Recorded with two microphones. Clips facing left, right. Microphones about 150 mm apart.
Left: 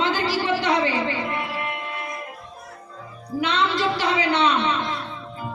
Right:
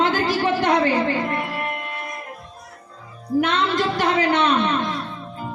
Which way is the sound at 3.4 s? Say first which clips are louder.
Right 3 dB; 50° right (ahead or behind).